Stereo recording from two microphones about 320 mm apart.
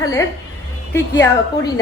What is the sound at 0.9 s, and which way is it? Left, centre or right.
Speech, centre.